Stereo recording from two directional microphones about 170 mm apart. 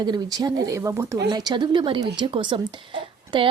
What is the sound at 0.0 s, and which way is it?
Speech, 25° right (ahead or behind).